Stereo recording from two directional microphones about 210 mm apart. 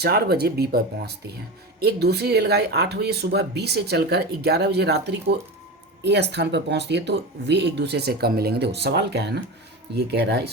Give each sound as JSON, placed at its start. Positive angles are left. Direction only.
{"t": 0.0, "sound": "speech", "side_deg": -50}